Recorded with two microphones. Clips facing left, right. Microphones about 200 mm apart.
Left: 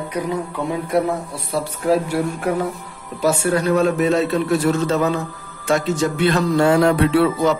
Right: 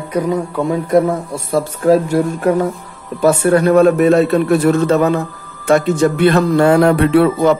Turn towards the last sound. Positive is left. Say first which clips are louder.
# right 5 dB
turn(degrees=-55)  # may be behind; listen again after turning